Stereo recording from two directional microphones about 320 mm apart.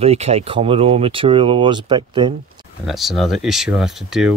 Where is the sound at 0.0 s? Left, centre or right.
Centre.